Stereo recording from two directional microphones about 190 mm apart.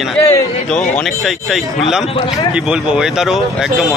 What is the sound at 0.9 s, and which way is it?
Speech, centre (ahead or behind).